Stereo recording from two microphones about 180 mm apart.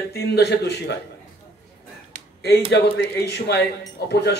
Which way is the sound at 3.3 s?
65° left (ahead or behind).